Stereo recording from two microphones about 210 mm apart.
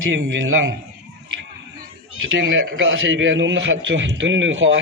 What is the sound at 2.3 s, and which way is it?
A man's voice, 65° right (ahead or behind).